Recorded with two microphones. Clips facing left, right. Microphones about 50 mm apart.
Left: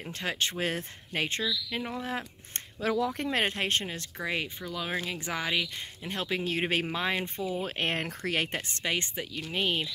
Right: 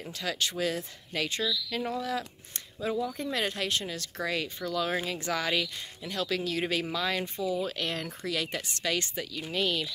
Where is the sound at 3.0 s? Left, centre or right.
Left.